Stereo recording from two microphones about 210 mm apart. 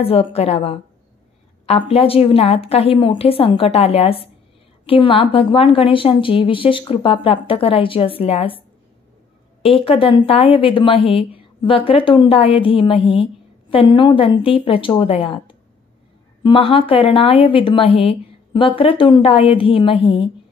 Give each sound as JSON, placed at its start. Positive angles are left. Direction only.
{"t": 0.0, "sound": "a woman's voice", "side_deg": 30}
{"t": 9.6, "sound": "a woman's voice", "side_deg": 25}